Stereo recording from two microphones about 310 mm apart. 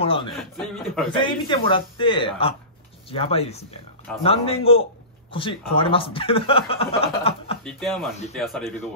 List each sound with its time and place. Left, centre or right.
0.0 s speech: centre
0.4 s a man's voice: centre
1.1 s a man's voice: centre
7.6 s a man's voice: centre